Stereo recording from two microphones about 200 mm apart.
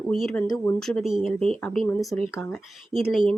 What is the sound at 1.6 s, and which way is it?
Speech, 10° left (ahead or behind).